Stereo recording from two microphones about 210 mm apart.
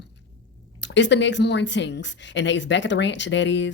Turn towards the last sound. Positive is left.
turn(degrees=60)  # may be behind; listen again after turning